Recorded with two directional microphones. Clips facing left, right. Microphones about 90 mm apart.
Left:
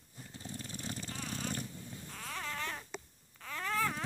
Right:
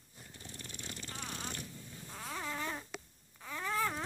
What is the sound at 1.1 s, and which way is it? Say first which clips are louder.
Vehicle: left 1 dB; 30° right (ahead or behind).